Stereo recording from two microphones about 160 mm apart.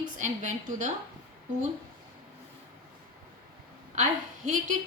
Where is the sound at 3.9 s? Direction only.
50° right (ahead or behind).